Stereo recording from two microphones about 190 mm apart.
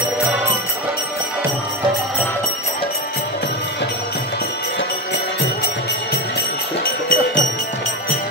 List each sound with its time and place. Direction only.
6.8 s music: 50° left (ahead or behind)